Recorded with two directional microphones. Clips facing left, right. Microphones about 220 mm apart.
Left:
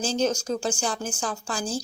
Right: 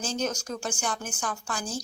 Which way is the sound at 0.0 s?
30° left (ahead or behind).